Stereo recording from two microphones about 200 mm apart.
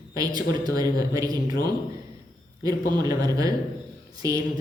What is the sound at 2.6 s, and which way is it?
Speech, 20° right (ahead or behind).